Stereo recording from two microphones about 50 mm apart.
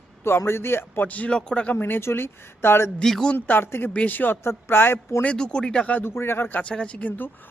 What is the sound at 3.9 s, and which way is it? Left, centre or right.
Speech, left.